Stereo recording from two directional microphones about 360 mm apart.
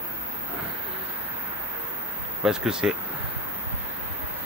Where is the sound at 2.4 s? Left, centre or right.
Centre.